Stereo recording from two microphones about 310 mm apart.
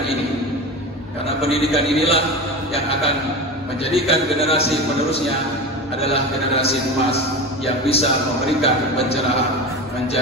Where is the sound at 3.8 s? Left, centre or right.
Centre.